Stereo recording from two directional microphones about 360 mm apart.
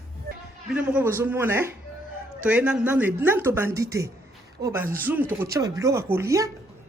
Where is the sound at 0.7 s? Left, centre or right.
Centre.